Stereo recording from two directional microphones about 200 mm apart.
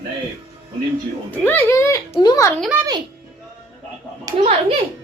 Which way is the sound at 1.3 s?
10° left (ahead or behind).